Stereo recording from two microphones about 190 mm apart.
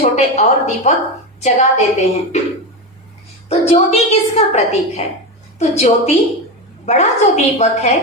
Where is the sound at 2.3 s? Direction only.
40° left (ahead or behind).